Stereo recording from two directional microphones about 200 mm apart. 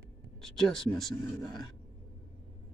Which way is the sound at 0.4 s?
Centre (ahead or behind).